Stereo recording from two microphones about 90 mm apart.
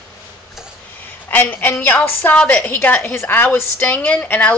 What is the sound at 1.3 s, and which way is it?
Speech, 20° left (ahead or behind).